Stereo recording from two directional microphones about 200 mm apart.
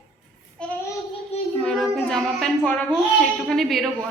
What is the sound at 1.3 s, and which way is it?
Child singing, 30° left (ahead or behind).